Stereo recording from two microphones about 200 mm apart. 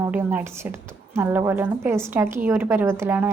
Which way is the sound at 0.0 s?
10° right (ahead or behind).